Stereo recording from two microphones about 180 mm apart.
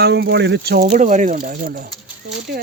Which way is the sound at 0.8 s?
45° right (ahead or behind).